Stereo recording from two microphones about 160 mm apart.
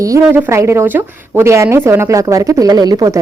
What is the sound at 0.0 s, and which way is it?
A woman's voice, 15° right (ahead or behind).